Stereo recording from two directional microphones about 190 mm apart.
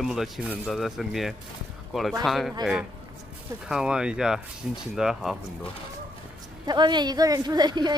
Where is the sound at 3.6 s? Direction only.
5° right (ahead or behind).